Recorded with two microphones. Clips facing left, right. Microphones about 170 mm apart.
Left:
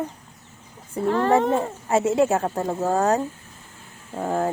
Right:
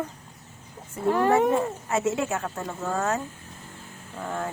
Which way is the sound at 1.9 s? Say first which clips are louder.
Left 8 dB; 30° left (ahead or behind).